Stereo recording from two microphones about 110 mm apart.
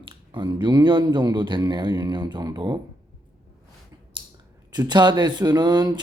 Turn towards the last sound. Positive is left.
turn(degrees=-40)  # may be behind; listen again after turning